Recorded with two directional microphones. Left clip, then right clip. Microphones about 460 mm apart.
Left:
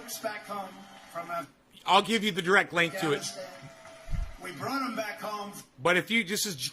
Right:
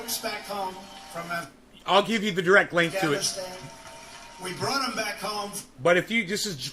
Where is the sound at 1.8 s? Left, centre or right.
Centre.